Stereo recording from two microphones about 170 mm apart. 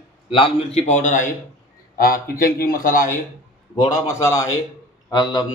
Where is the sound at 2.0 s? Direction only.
60° left (ahead or behind).